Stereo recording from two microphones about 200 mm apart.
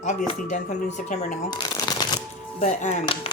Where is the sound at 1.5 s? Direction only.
20° left (ahead or behind).